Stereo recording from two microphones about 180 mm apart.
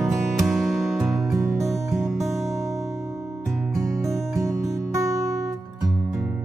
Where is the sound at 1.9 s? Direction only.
Centre (ahead or behind).